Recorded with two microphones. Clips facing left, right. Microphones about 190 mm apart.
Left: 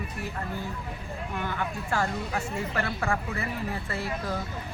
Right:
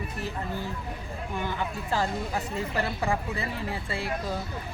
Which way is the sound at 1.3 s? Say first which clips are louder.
Right 1 dB; 5° right (ahead or behind).